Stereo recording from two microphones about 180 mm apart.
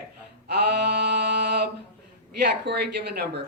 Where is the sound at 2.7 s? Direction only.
65° right (ahead or behind).